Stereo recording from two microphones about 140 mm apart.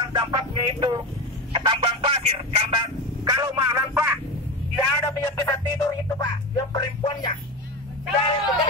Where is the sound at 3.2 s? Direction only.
30° right (ahead or behind).